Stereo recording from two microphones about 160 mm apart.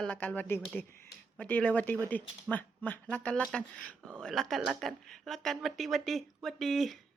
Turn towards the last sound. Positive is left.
turn(degrees=0)  # may be behind; listen again after turning